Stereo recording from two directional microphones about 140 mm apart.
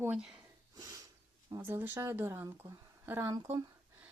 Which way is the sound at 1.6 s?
15° right (ahead or behind).